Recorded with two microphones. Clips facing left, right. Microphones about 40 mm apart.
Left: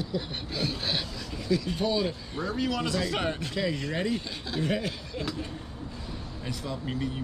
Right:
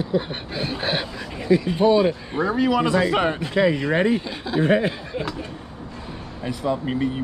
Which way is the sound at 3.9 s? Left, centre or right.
Right.